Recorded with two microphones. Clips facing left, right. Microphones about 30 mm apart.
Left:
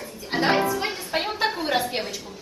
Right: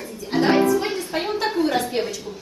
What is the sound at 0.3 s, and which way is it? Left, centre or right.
Music, centre.